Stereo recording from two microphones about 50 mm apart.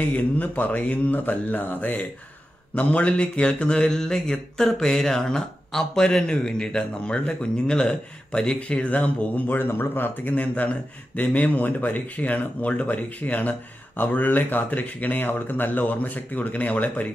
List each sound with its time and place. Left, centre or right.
0.0 s a man's voice: left
9.5 s speech: left